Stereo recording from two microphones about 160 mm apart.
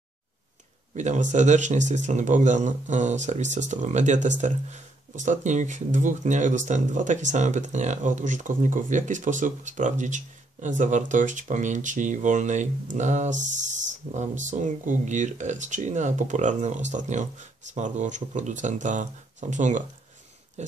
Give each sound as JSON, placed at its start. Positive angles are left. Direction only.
{"t": 0.9, "sound": "speech", "side_deg": -50}